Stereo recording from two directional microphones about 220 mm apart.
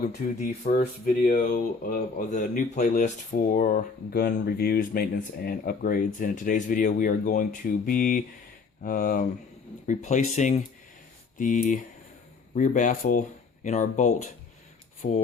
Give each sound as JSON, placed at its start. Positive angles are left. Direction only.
{"t": 0.0, "sound": "speech", "side_deg": 35}